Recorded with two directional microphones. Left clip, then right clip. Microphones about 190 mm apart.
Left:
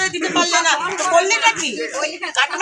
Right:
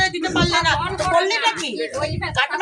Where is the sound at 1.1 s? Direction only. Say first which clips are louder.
Left 4 dB; 25° right (ahead or behind).